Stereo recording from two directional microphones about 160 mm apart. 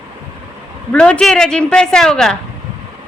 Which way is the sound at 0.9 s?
5° left (ahead or behind).